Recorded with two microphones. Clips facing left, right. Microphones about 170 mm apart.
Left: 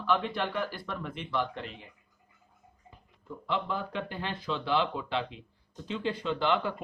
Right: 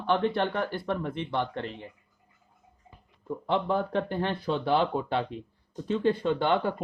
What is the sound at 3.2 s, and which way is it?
Speech, 55° right (ahead or behind).